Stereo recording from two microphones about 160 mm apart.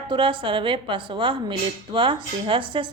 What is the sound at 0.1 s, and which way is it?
A woman's voice, 30° right (ahead or behind).